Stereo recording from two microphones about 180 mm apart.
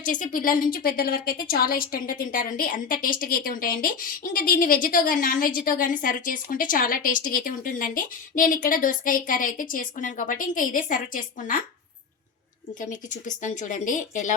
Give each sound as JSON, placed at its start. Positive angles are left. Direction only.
{"t": 0.0, "sound": "a woman's voice", "side_deg": 45}
{"t": 12.8, "sound": "a woman's voice", "side_deg": 45}